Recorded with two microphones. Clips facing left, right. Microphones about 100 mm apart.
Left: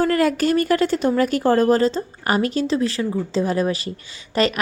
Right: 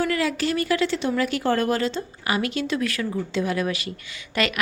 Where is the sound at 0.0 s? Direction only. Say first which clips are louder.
Left 5 dB; 45° left (ahead or behind).